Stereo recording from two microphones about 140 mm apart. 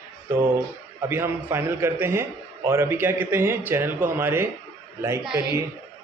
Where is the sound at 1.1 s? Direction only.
15° right (ahead or behind).